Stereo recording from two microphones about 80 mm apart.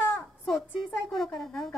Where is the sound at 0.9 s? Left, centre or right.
Centre.